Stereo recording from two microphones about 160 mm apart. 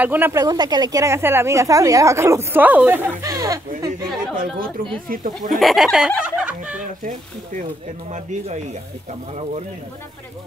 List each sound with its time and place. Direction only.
0.0 s speech: 10° right (ahead or behind)
5.0 s speech: 60° right (ahead or behind)
5.5 s speech: centre (ahead or behind)
8.1 s speech: 50° right (ahead or behind)